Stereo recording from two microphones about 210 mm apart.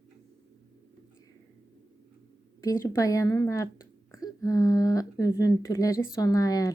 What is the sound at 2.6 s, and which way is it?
Speech, 15° left (ahead or behind).